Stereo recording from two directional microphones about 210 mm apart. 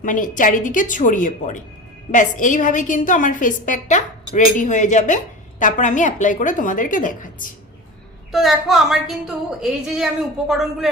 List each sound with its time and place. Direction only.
0.0 s a woman's voice: 40° left (ahead or behind)
8.3 s a woman's voice: centre (ahead or behind)